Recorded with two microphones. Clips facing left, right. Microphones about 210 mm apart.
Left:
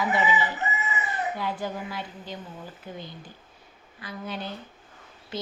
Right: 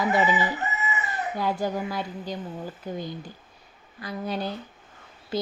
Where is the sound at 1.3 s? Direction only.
40° right (ahead or behind).